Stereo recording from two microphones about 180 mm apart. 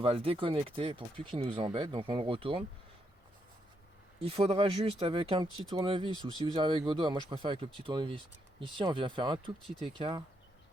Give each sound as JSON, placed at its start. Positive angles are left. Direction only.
{"t": 0.0, "sound": "speech", "side_deg": -30}
{"t": 4.2, "sound": "speech", "side_deg": -30}